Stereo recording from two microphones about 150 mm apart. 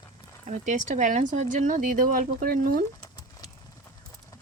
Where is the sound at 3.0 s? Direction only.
25° left (ahead or behind).